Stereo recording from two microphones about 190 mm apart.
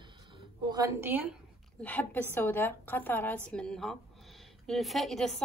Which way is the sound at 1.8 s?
10° left (ahead or behind).